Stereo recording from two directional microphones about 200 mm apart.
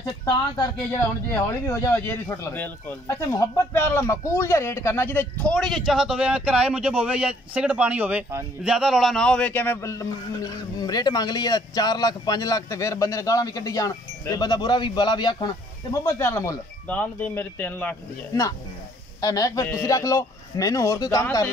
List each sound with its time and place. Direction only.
0.0 s speech: 20° left (ahead or behind)
1.7 s speech: 10° left (ahead or behind)